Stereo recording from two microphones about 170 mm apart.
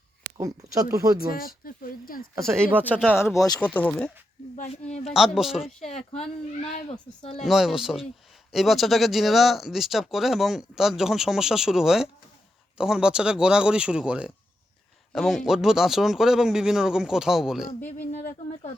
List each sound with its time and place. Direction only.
0.3 s speech: 20° right (ahead or behind)
1.3 s speech: 60° left (ahead or behind)
2.4 s speech: 5° left (ahead or behind)
2.9 s speech: 10° right (ahead or behind)
3.6 s speech: 10° left (ahead or behind)
5.8 s speech: 40° left (ahead or behind)
7.4 s speech: centre (ahead or behind)
17.8 s speech: 50° left (ahead or behind)